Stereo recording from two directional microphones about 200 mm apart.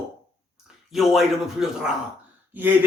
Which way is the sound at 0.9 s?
Centre (ahead or behind).